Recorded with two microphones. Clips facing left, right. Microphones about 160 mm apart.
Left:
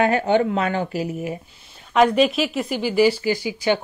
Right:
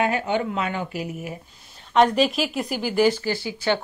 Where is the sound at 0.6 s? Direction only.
40° left (ahead or behind).